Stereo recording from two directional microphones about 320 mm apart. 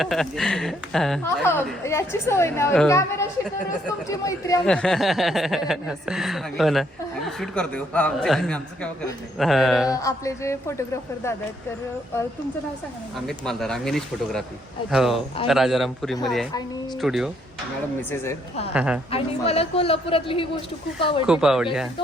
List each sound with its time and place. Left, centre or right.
0.0 s speech: centre
9.9 s speech: centre
13.1 s speech: centre
16.6 s speech: centre
17.0 s speech: centre
18.7 s speech: centre
19.1 s speech: centre
21.2 s speech: centre